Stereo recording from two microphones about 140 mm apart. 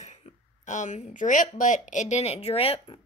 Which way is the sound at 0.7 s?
60° left (ahead or behind).